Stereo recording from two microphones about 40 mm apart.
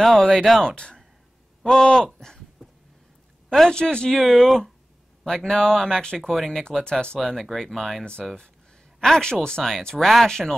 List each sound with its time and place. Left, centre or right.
0.2 s speech: centre
1.6 s speech: centre
2.1 s a sound: centre
3.4 s speech: centre
3.7 s speech: left
4.2 s speech: centre
5.2 s speech: centre
6.1 s speech: centre
6.8 s speech: left
7.2 s speech: centre
8.0 s speech: left
9.0 s speech: centre